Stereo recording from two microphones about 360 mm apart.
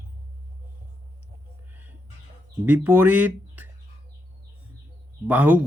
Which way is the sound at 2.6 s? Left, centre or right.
Centre.